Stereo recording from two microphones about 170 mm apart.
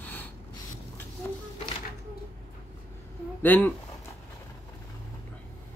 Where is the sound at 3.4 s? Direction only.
10° left (ahead or behind).